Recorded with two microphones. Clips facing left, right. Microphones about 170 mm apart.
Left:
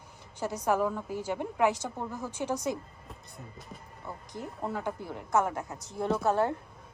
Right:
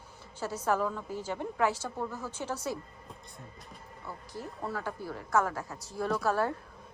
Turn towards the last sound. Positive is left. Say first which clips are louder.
# left 2 dB
turn(degrees=20)  # may be behind; listen again after turning